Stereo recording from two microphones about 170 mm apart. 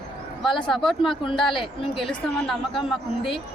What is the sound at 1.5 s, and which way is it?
Speech, 30° left (ahead or behind).